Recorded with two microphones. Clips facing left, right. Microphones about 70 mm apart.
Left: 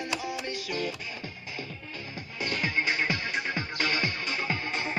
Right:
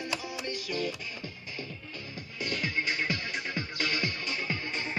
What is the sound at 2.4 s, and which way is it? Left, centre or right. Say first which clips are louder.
Music: left 3 dB; left.